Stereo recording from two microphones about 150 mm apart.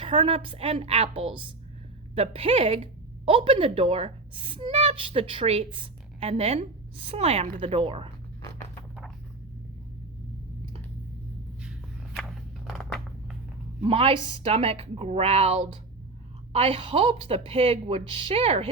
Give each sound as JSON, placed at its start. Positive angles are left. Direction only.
{"t": 0.0, "sound": "a woman's voice", "side_deg": -35}
{"t": 12.1, "sound": "a sound", "side_deg": 0}
{"t": 13.8, "sound": "a woman's voice", "side_deg": -40}